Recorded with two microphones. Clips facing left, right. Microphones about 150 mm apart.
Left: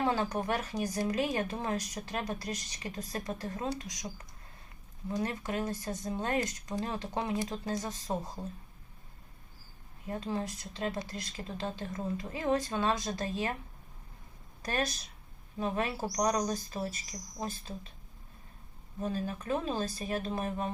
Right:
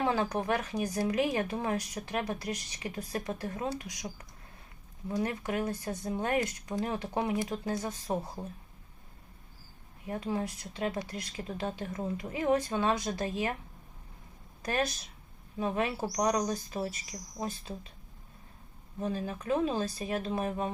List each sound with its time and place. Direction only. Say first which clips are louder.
0.0 s speech: right 1 dB; 15° right (ahead or behind)
5.0 s speech: right 2 dB; 15° right (ahead or behind)
10.1 s speech: right 2 dB; 15° right (ahead or behind)
15.5 s speech: right 2 dB; 15° right (ahead or behind)
19.0 s speech: right 1 dB; 15° right (ahead or behind)